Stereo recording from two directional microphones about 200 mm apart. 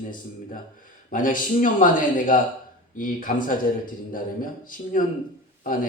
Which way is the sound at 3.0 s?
45° left (ahead or behind).